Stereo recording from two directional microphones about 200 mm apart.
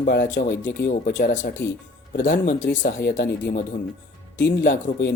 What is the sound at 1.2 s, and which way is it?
Speech, 40° left (ahead or behind).